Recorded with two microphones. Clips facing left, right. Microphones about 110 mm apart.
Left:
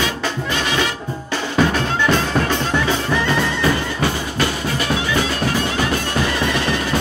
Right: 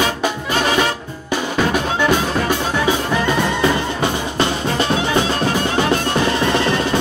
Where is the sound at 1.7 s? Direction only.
15° right (ahead or behind).